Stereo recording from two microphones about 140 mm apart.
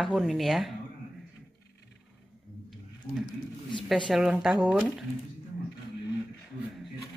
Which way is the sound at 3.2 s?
35° left (ahead or behind).